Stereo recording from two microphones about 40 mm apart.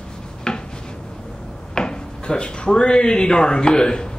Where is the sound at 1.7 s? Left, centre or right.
Centre.